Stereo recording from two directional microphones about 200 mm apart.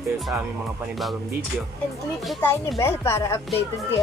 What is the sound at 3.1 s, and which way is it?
Speech, 15° left (ahead or behind).